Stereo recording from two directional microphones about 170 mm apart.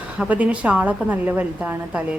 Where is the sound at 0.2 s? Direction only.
10° right (ahead or behind).